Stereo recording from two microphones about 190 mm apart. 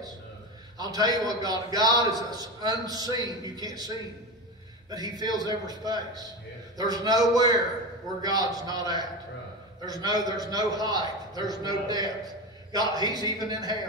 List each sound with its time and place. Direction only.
0.9 s a man's voice: 20° right (ahead or behind)